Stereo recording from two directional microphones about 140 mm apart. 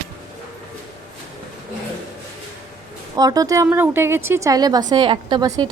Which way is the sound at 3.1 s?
25° right (ahead or behind).